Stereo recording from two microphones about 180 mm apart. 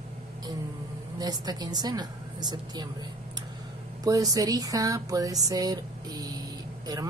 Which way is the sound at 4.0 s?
20° right (ahead or behind).